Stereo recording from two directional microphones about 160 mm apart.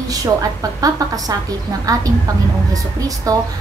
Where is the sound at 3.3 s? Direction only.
20° right (ahead or behind).